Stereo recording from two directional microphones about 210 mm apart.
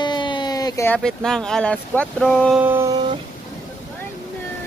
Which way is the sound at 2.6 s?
10° right (ahead or behind).